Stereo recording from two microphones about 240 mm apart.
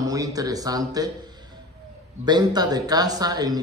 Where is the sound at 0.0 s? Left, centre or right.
Centre.